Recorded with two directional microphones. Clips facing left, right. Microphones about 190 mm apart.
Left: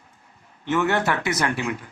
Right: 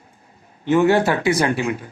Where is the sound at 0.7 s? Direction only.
30° right (ahead or behind).